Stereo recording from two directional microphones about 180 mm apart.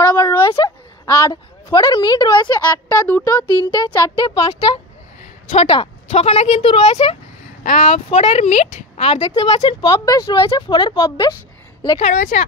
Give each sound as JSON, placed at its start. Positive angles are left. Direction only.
{"t": 0.0, "sound": "a sound", "side_deg": 15}
{"t": 1.0, "sound": "a woman's voice", "side_deg": 20}
{"t": 5.5, "sound": "speech", "side_deg": 30}
{"t": 12.0, "sound": "speech", "side_deg": 40}